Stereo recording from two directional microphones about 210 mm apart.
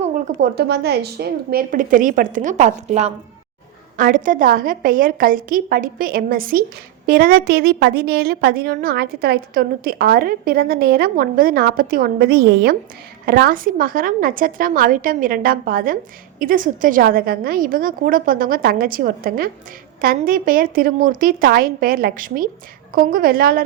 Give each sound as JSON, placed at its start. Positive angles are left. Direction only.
{"t": 0.0, "sound": "a woman's voice", "side_deg": -45}